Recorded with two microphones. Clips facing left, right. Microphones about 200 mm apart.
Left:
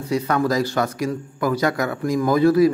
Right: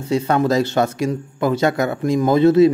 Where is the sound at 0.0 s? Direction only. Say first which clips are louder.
Right 3 dB; 25° right (ahead or behind).